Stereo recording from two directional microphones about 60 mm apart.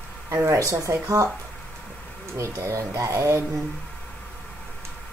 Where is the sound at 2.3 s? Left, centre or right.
Right.